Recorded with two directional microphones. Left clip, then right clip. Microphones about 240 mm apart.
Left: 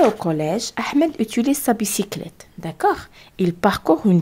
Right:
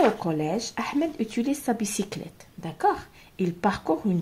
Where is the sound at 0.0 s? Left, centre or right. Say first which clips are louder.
Left 6 dB; left.